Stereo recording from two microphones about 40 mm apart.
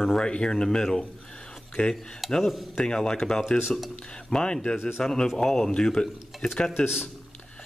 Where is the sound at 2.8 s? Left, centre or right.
Centre.